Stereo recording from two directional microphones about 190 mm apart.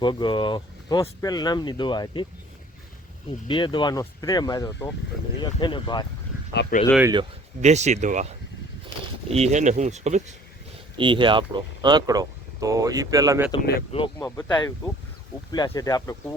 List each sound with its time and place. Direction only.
0.0 s speech: 25° left (ahead or behind)
3.4 s speech: 25° left (ahead or behind)
6.5 s speech: 65° left (ahead or behind)
7.0 s speech: 20° right (ahead or behind)
7.6 s speech: 35° right (ahead or behind)
9.3 s speech: 35° right (ahead or behind)
10.9 s speech: 25° right (ahead or behind)
13.9 s speech: 25° left (ahead or behind)
14.3 s speech: 10° left (ahead or behind)
15.5 s speech: 20° left (ahead or behind)